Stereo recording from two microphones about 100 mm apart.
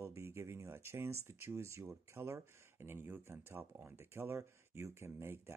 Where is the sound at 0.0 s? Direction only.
25° right (ahead or behind).